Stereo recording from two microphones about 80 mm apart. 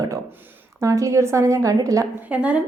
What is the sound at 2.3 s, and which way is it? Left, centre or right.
Speech, centre.